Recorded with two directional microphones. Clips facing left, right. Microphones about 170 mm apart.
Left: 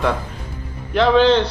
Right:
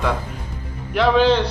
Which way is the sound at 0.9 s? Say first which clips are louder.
Left 2 dB; 10° right (ahead or behind).